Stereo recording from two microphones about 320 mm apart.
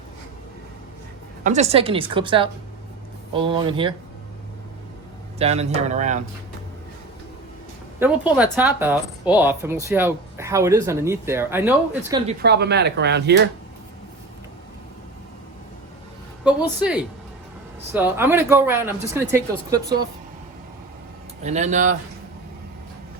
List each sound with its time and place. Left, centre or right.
1.5 s speech: right
5.4 s speech: centre
7.9 s speech: centre
12.4 s speech: right
16.4 s a woman's voice: centre
21.4 s speech: right